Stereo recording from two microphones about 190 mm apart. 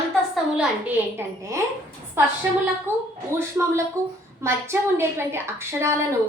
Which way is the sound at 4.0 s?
15° right (ahead or behind).